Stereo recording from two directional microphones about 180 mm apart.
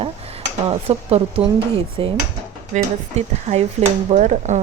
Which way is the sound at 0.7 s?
35° right (ahead or behind).